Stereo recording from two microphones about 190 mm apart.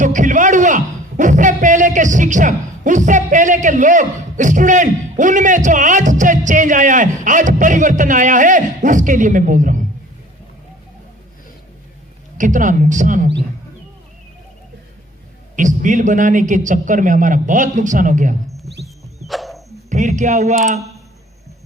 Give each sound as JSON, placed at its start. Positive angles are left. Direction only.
{"t": 0.0, "sound": "a man's voice", "side_deg": -40}
{"t": 12.4, "sound": "a man's voice", "side_deg": -40}
{"t": 15.5, "sound": "a man's voice", "side_deg": -40}
{"t": 18.8, "sound": "music", "side_deg": 0}
{"t": 19.9, "sound": "speech", "side_deg": -40}